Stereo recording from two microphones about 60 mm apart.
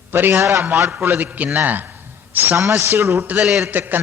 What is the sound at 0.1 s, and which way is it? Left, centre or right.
Speech, right.